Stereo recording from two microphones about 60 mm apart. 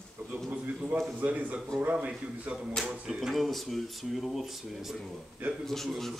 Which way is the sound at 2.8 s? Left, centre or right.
Centre.